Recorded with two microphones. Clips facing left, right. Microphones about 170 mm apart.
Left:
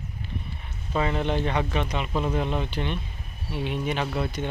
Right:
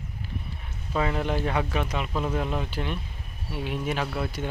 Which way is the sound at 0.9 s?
Centre (ahead or behind).